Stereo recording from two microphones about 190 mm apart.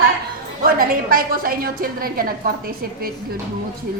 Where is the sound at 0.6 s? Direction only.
50° right (ahead or behind).